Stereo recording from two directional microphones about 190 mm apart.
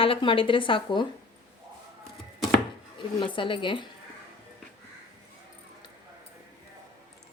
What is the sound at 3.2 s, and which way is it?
Speech, 25° left (ahead or behind).